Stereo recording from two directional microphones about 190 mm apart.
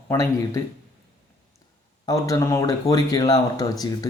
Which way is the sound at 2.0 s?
15° left (ahead or behind).